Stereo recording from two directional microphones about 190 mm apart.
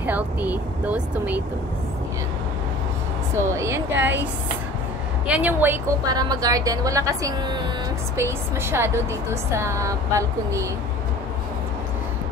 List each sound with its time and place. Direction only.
0.0 s speech: 10° right (ahead or behind)
3.3 s speech: 15° right (ahead or behind)
5.2 s speech: 5° right (ahead or behind)